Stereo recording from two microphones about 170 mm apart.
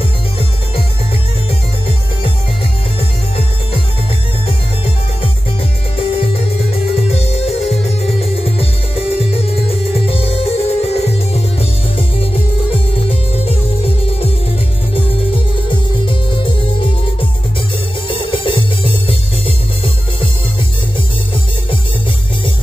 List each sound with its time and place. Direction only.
7.1 s music: 40° left (ahead or behind)
13.1 s music: 35° left (ahead or behind)
15.7 s music: 30° left (ahead or behind)
18.0 s music: 30° left (ahead or behind)